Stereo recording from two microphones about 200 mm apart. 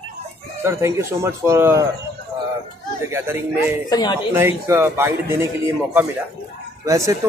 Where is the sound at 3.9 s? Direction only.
20° left (ahead or behind).